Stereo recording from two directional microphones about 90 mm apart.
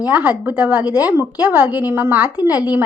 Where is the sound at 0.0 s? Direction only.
15° right (ahead or behind).